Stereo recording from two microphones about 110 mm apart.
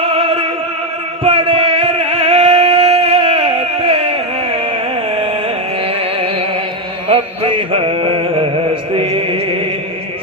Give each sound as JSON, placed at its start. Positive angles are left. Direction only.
{"t": 0.1, "sound": "opera", "side_deg": -60}
{"t": 1.2, "sound": "music", "side_deg": -60}
{"t": 7.1, "sound": "music", "side_deg": -60}